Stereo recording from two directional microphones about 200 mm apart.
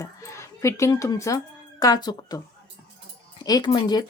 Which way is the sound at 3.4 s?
20° left (ahead or behind).